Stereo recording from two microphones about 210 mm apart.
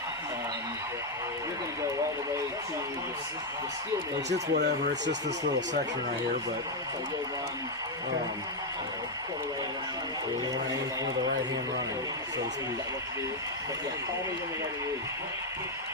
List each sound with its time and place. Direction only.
4.5 s speech: 50° right (ahead or behind)